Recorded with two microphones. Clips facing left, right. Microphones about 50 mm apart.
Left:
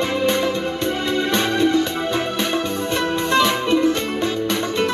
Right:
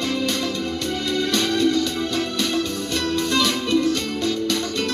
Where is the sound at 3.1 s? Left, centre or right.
Left.